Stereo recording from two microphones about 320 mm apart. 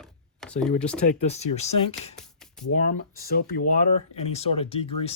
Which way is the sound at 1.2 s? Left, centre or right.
Centre.